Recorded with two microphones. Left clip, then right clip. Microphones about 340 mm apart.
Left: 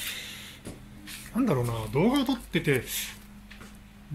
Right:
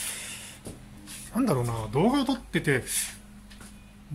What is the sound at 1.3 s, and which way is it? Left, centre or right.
Speech, centre.